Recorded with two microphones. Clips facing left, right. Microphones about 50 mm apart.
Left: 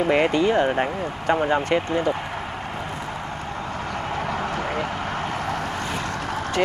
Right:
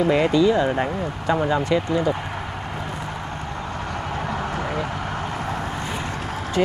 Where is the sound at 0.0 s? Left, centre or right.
Left.